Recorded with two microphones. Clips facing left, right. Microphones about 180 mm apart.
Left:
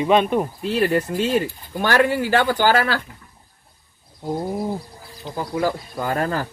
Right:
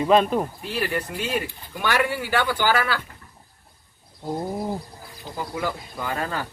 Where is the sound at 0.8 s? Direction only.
40° left (ahead or behind).